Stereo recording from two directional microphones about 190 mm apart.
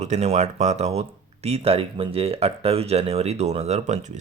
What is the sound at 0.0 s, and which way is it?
Speech, 35° right (ahead or behind).